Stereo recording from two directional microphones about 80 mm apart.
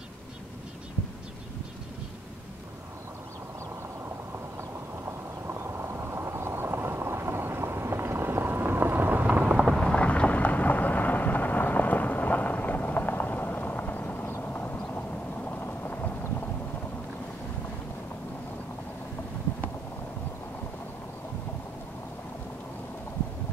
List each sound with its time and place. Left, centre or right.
5.5 s vehicle: right
9.4 s a sound: centre
9.8 s thunder: centre